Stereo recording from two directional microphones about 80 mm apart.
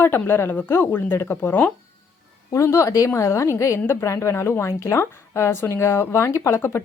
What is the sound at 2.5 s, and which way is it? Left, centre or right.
A woman's voice, left.